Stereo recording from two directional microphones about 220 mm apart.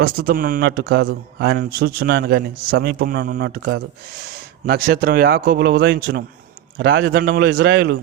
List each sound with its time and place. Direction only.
0.0 s speech: 40° right (ahead or behind)